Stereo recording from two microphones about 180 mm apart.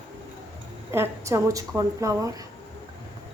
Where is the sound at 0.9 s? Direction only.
15° right (ahead or behind).